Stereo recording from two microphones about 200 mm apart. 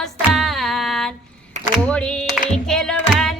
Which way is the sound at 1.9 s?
Centre (ahead or behind).